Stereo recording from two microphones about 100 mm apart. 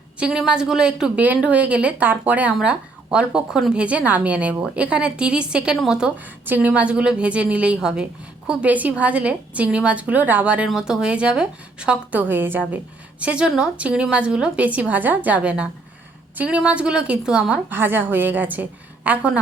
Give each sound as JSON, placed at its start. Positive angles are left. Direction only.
{"t": 0.2, "sound": "a woman's voice", "side_deg": -10}
{"t": 17.7, "sound": "a woman's voice", "side_deg": -20}